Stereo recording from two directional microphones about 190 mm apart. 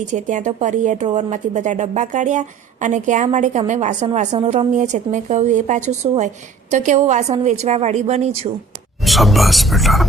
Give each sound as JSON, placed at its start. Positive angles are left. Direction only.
{"t": 0.0, "sound": "a woman's voice", "side_deg": -40}
{"t": 9.0, "sound": "speech", "side_deg": 0}